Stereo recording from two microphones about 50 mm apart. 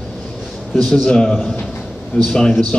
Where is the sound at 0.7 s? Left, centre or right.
Centre.